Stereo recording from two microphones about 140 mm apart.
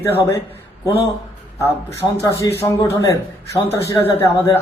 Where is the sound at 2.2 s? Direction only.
20° left (ahead or behind).